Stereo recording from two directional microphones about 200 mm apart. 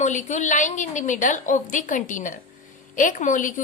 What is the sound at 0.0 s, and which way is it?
A woman's voice, 40° left (ahead or behind).